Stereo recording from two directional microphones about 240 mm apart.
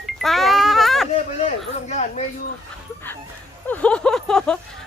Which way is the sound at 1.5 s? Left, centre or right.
Left.